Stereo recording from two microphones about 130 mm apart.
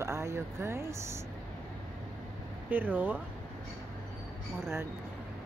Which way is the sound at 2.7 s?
15° right (ahead or behind).